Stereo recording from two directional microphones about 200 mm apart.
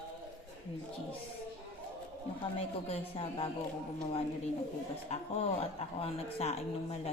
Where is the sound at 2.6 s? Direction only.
30° left (ahead or behind).